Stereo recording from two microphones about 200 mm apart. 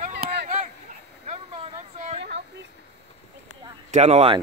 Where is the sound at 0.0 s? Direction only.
50° right (ahead or behind).